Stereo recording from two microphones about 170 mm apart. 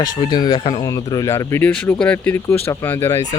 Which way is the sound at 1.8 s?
5° left (ahead or behind).